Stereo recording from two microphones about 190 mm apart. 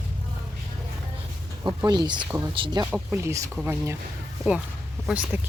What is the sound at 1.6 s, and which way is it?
A woman's voice, 15° right (ahead or behind).